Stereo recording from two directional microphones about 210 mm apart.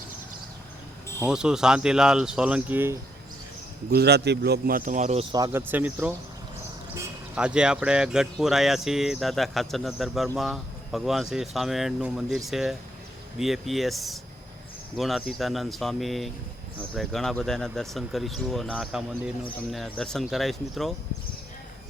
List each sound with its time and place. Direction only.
1.2 s speech: 5° right (ahead or behind)
3.9 s speech: 50° right (ahead or behind); by 5.2 s 35° right (ahead or behind)
5.3 s speech: 15° right (ahead or behind)
7.3 s speech: 5° right (ahead or behind)